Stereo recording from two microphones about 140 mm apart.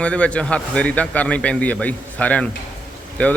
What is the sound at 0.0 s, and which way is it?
A man's voice, 10° left (ahead or behind).